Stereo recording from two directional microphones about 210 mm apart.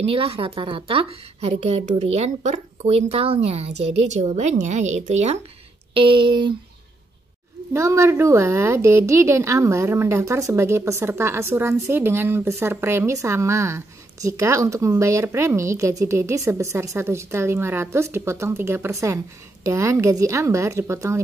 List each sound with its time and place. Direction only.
0.0 s a woman's voice: 25° right (ahead or behind)
7.7 s speech: 15° right (ahead or behind)